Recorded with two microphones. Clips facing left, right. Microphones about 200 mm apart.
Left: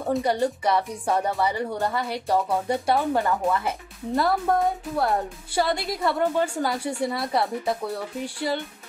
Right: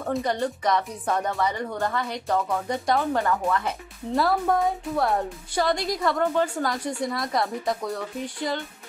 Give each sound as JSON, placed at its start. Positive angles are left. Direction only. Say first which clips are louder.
{"t": 0.1, "sound": "speech", "louder": "left 3 dB", "side_deg": 10}
{"t": 2.9, "sound": "speech", "louder": "even", "side_deg": 5}
{"t": 3.3, "sound": "speech", "louder": "left 1 dB", "side_deg": 15}
{"t": 3.6, "sound": "speech", "louder": "left 1 dB", "side_deg": 0}